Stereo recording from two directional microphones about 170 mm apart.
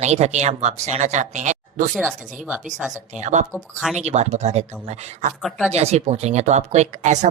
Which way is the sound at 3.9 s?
40° right (ahead or behind).